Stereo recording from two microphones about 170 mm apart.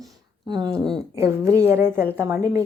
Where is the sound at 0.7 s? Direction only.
5° left (ahead or behind).